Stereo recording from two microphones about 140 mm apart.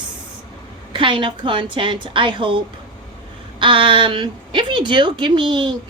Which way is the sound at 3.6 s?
35° right (ahead or behind).